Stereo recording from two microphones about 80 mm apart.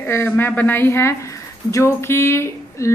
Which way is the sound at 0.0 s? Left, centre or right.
Left.